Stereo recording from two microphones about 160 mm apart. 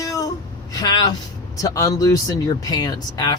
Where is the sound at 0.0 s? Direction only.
20° left (ahead or behind).